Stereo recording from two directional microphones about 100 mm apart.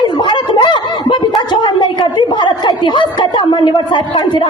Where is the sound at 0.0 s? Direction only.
50° left (ahead or behind).